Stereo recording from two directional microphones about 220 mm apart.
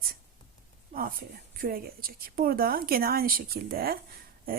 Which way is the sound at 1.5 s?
40° right (ahead or behind).